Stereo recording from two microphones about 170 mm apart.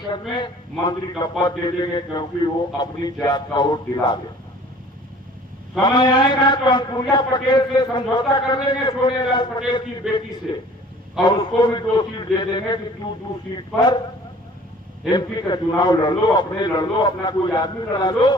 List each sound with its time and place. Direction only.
0.1 s a man's voice: 25° left (ahead or behind)
5.8 s a man's voice: 25° left (ahead or behind)
10.0 s a man's voice: 5° right (ahead or behind)
11.2 s a man's voice: 25° left (ahead or behind)
15.1 s a man's voice: 25° left (ahead or behind)